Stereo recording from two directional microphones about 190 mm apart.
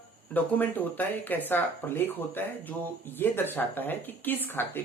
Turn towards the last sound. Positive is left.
turn(degrees=10)  # may be behind; listen again after turning